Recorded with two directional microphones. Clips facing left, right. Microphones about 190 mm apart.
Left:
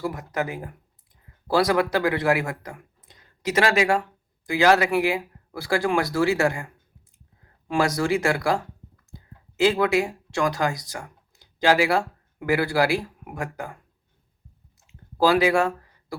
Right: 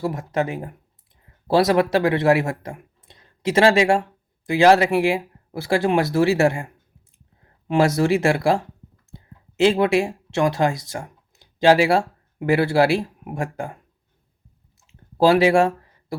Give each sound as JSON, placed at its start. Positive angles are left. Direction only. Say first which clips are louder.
{"t": 0.0, "sound": "speech", "louder": "right 4 dB", "side_deg": -25}
{"t": 15.2, "sound": "speech", "louder": "right 4 dB", "side_deg": -25}